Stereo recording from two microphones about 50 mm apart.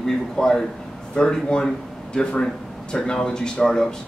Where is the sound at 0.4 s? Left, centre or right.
Centre.